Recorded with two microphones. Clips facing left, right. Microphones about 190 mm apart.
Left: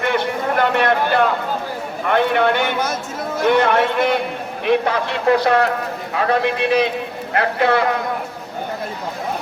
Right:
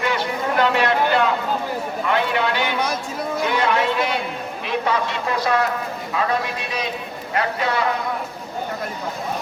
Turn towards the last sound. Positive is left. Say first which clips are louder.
# left 5 dB
turn(degrees=60)  # may be behind; listen again after turning